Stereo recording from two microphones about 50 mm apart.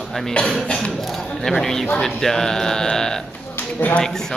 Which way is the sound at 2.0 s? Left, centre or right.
Centre.